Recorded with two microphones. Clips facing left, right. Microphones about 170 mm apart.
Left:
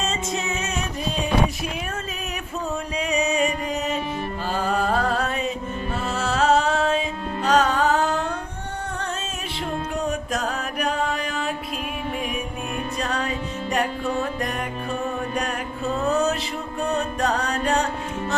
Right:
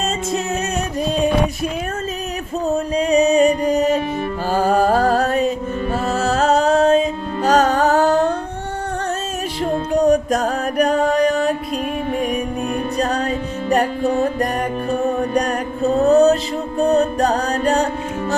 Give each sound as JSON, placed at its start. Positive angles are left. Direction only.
{"t": 0.4, "sound": "music", "side_deg": -40}
{"t": 2.6, "sound": "music", "side_deg": -35}
{"t": 9.6, "sound": "music", "side_deg": -40}